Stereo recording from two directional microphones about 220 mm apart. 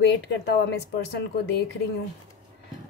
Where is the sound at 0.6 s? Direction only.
50° left (ahead or behind).